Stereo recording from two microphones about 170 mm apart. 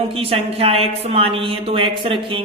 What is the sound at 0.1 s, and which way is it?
Speech, 35° right (ahead or behind).